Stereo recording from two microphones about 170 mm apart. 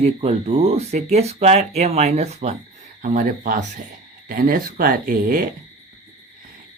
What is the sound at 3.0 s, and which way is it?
Speech, 50° right (ahead or behind).